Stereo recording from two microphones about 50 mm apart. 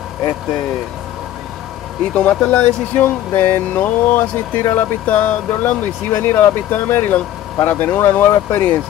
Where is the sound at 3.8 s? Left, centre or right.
Left.